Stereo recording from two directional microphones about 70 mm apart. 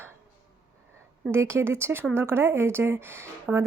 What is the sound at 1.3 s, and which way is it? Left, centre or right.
A woman's voice, right.